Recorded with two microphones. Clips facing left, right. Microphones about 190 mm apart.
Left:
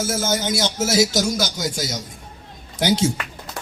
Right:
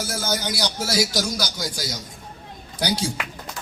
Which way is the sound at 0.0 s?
25° left (ahead or behind).